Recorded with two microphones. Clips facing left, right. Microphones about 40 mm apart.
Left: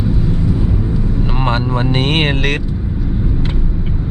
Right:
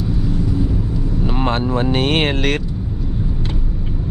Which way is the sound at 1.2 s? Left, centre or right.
Centre.